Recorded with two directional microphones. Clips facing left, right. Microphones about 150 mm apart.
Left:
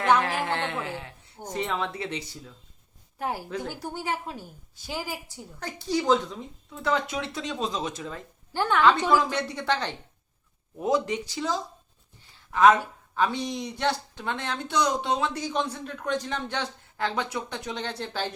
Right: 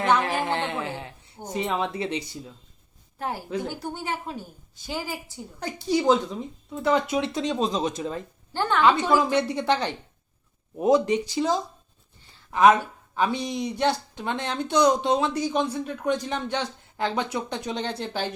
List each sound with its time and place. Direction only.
0.2 s a sound: 15° right (ahead or behind)
1.4 s speech: 10° right (ahead or behind)
3.2 s a woman's voice: 10° left (ahead or behind)
5.5 s speech: 15° right (ahead or behind)
8.5 s speech: 10° left (ahead or behind)
8.8 s speech: 10° right (ahead or behind)